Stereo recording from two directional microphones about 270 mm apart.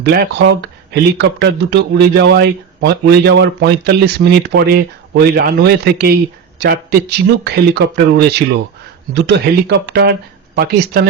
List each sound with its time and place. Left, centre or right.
0.0 s speech: right